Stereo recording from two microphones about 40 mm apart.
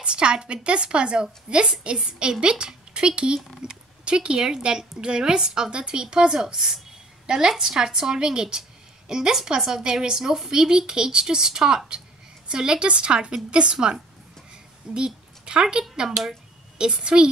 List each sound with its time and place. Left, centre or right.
0.0 s a woman's voice: right
15.0 s a woman's voice: right